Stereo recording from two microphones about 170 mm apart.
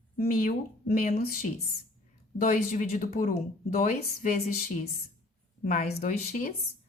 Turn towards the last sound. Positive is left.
turn(degrees=45)  # may be behind; listen again after turning